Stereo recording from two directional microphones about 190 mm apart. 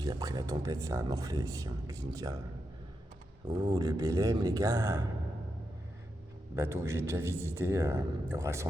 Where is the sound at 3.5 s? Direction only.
20° right (ahead or behind).